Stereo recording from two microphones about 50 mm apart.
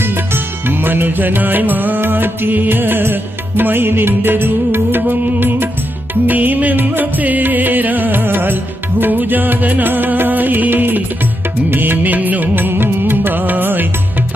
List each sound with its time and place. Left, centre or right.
0.0 s music: right